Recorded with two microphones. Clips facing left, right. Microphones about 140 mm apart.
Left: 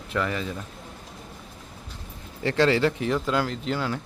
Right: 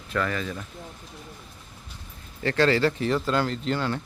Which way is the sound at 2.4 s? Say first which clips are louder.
Even; 20° left (ahead or behind).